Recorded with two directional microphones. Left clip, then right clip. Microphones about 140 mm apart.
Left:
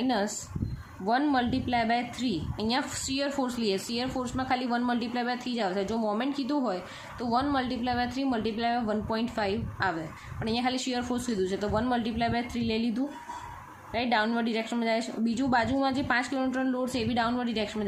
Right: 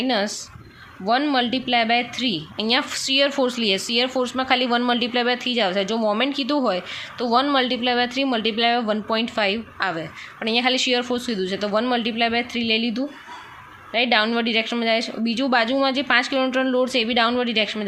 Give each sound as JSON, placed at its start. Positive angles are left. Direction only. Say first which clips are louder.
{"t": 0.0, "sound": "a woman's voice", "louder": "right 6 dB", "side_deg": -15}